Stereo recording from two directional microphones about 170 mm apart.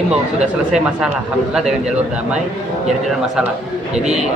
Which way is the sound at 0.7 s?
5° right (ahead or behind).